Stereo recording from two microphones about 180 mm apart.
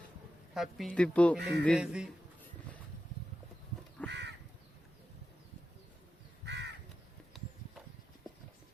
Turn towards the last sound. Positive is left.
turn(degrees=0)  # may be behind; listen again after turning